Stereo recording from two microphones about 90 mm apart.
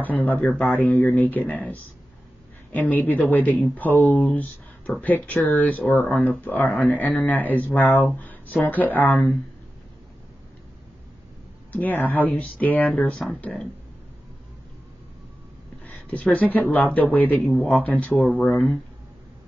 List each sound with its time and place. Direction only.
0.0 s speech: 20° left (ahead or behind)
11.7 s speech: 20° left (ahead or behind)
15.8 s a sound: 15° left (ahead or behind)
16.3 s speech: 20° left (ahead or behind)
17.3 s speech: 5° left (ahead or behind)
18.0 s speech: 15° left (ahead or behind)